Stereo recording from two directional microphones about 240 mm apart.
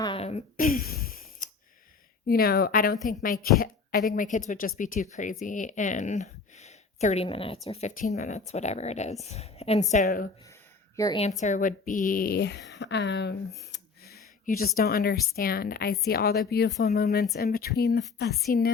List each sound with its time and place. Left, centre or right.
0.0 s a sound: left
2.2 s speech: left
10.9 s speech: centre
11.3 s a woman's voice: left